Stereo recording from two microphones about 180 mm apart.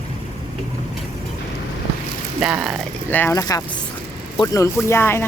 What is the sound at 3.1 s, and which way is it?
Speech, 15° left (ahead or behind).